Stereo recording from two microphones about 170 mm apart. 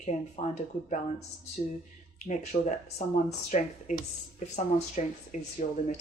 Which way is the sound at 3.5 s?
45° left (ahead or behind).